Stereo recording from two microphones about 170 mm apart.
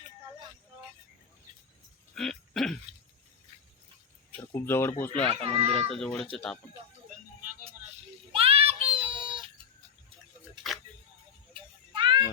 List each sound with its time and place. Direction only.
2.1 s throat clearing: centre (ahead or behind)
4.4 s speech: 15° left (ahead or behind)
5.4 s a child's voice: 35° right (ahead or behind)
5.9 s speech: 5° left (ahead or behind)
8.3 s child singing: 35° right (ahead or behind)
9.0 s cat: 25° right (ahead or behind)
11.5 s music: 30° right (ahead or behind)